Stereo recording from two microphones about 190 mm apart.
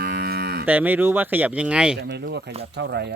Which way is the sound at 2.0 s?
60° right (ahead or behind).